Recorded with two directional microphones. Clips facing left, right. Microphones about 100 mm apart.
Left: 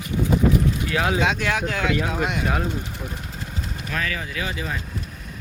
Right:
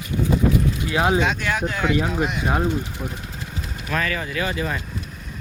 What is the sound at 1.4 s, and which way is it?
Speech, 90° left.